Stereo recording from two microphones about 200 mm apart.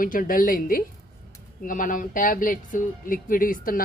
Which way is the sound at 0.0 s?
45° left (ahead or behind).